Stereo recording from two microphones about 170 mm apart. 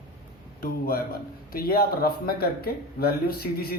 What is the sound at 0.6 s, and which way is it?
A man's voice, 60° left (ahead or behind).